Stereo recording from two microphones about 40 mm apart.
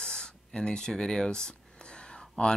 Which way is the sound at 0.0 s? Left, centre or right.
Centre.